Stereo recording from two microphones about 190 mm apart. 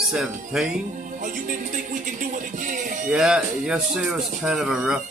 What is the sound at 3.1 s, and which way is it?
Speech, 5° right (ahead or behind).